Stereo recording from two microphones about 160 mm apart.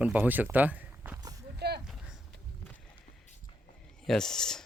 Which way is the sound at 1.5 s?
90° right.